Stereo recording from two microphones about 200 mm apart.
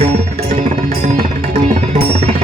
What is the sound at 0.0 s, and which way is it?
Music, 30° right (ahead or behind).